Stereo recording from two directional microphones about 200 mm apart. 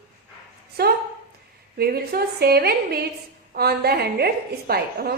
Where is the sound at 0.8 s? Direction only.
55° right (ahead or behind).